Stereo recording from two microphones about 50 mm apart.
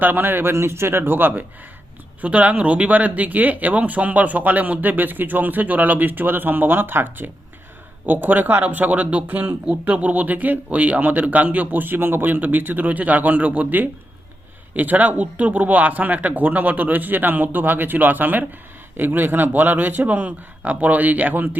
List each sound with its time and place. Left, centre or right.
0.0 s speech: right
0.5 s speech: right
2.2 s speech: right